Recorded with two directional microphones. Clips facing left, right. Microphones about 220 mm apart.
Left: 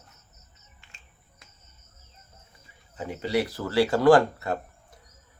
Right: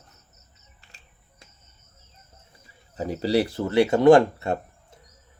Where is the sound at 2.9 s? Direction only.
35° right (ahead or behind).